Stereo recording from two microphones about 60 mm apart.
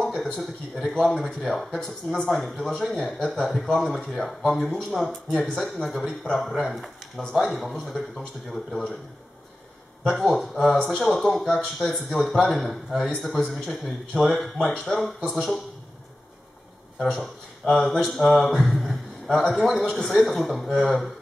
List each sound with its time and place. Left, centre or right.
0.0 s a man's voice: centre
6.0 s speech: centre
6.4 s a man's voice: centre
10.0 s a man's voice: centre
17.0 s a man's voice: centre